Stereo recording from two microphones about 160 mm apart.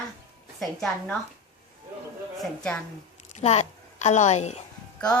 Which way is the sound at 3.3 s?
45° left (ahead or behind).